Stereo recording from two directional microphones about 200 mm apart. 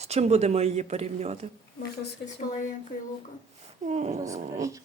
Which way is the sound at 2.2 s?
50° left (ahead or behind).